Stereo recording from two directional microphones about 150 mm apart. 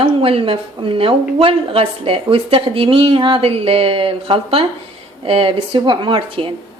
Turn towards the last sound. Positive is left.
turn(degrees=-35)  # may be behind; listen again after turning